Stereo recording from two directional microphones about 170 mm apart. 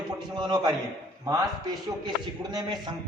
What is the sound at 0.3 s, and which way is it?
Speech, 25° right (ahead or behind).